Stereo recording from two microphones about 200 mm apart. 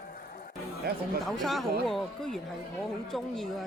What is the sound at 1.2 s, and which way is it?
A woman's voice, centre (ahead or behind).